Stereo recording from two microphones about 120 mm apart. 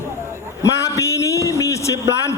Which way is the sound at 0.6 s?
25° left (ahead or behind).